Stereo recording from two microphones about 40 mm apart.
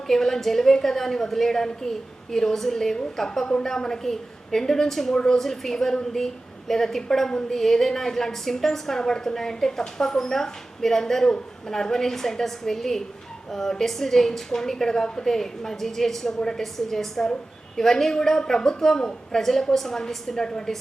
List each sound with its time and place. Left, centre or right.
0.1 s a woman's voice: centre